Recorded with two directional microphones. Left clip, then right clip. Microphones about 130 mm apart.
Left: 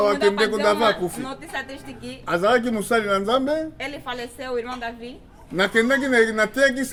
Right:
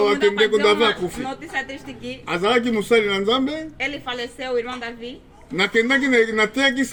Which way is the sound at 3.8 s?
35° left (ahead or behind).